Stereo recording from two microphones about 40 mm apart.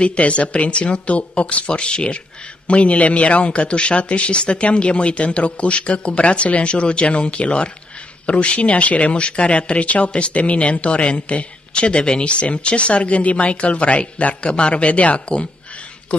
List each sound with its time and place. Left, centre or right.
0.0 s speech: left